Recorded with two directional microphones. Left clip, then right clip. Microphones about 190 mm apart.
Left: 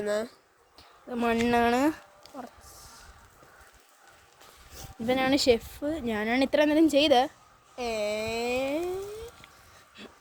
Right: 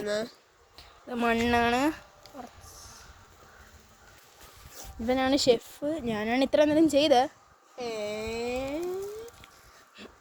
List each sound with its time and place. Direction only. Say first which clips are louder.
0.0 s speech: left 1 dB; 20° left (ahead or behind)
0.8 s a sound: right 1 dB; 10° left (ahead or behind)
1.4 s speech: left 2 dB; 25° left (ahead or behind)
4.8 s speech: left 1 dB; 5° left (ahead or behind)
7.8 s speech: left 4 dB; 30° left (ahead or behind)
10.0 s a sound: left 1 dB; 5° right (ahead or behind)